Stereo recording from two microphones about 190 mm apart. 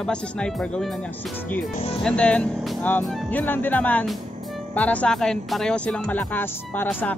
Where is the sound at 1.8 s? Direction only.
30° left (ahead or behind).